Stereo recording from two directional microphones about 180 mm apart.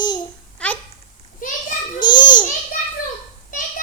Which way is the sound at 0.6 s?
5° left (ahead or behind).